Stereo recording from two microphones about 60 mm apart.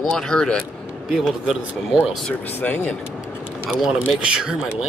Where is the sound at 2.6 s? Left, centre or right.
Left.